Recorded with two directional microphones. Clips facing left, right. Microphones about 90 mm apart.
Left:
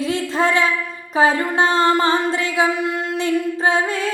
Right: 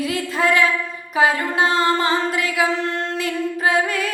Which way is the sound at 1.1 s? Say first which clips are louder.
Left 2 dB; 35° left (ahead or behind).